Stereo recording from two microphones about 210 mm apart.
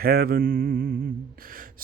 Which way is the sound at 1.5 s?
40° right (ahead or behind).